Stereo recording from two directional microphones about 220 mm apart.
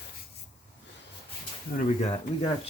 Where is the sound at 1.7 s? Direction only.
40° left (ahead or behind).